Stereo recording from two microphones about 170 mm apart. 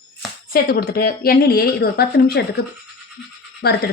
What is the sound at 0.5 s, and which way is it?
Speech, 65° left (ahead or behind).